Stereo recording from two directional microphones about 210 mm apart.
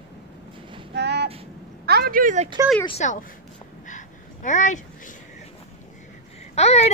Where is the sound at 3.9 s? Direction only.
35° left (ahead or behind).